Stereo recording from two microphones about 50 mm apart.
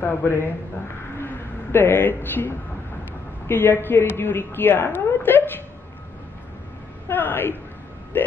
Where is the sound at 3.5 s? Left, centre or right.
Left.